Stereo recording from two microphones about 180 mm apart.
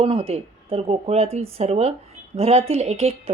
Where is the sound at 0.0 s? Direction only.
30° right (ahead or behind).